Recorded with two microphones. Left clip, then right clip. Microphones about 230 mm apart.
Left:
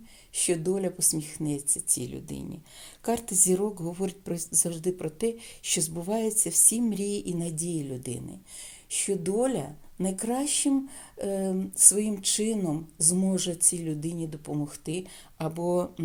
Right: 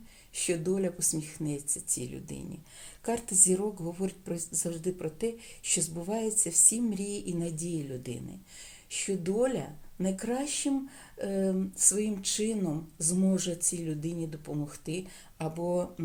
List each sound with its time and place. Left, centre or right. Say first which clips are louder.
0.3 s speech: left 3 dB; left